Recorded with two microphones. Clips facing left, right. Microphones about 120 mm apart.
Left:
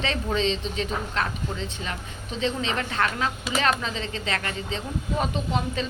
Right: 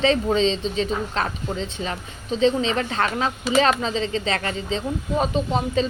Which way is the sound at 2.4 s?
30° right (ahead or behind).